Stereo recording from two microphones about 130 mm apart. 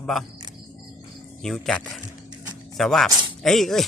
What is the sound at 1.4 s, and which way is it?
Speech, 5° left (ahead or behind).